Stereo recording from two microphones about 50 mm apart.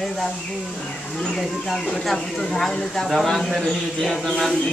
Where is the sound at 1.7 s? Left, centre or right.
Centre.